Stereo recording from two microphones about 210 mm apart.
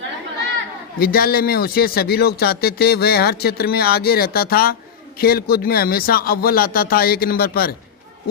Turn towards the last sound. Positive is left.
turn(degrees=45)  # may be behind; listen again after turning